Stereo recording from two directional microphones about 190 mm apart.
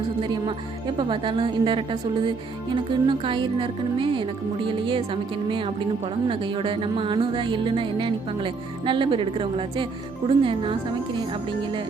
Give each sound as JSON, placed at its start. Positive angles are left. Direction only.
{"t": 0.2, "sound": "a woman's voice", "side_deg": -25}